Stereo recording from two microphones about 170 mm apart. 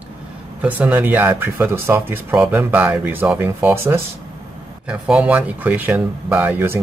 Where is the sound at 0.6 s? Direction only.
10° right (ahead or behind).